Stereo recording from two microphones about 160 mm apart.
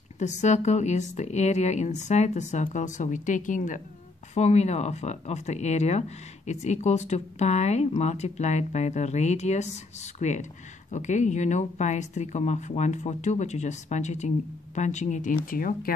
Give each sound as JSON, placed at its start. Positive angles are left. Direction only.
{"t": 0.2, "sound": "speech", "side_deg": 45}
{"t": 15.5, "sound": "speech", "side_deg": 60}